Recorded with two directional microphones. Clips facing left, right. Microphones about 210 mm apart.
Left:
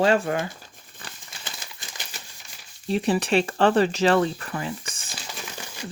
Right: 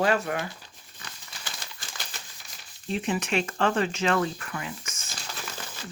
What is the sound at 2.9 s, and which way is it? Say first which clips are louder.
Speech: left 6 dB; 35° left (ahead or behind).